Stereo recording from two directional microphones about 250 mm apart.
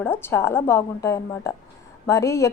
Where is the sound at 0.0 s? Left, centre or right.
Centre.